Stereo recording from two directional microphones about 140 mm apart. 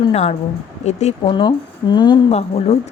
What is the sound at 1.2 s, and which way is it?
Speech, 35° left (ahead or behind).